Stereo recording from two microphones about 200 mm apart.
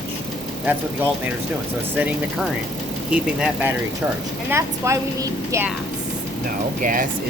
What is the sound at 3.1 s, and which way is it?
A woman's voice, 5° right (ahead or behind).